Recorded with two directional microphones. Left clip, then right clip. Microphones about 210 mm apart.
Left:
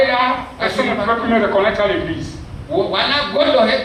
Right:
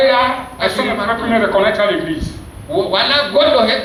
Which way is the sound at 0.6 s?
50° right (ahead or behind).